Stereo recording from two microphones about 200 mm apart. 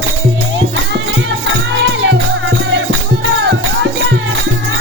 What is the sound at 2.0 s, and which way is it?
Music, 65° right (ahead or behind).